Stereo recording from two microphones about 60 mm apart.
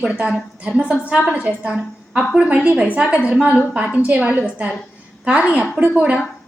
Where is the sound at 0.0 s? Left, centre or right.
Centre.